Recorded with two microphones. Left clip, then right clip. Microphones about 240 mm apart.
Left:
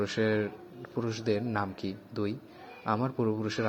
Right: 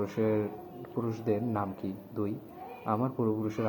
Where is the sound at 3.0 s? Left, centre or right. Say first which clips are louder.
Even; left.